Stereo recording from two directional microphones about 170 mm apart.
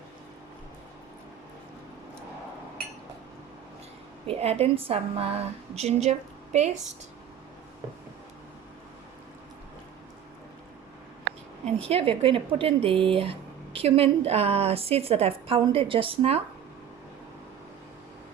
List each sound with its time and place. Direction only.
4.3 s a woman's voice: 35° right (ahead or behind)
11.6 s a woman's voice: 35° right (ahead or behind)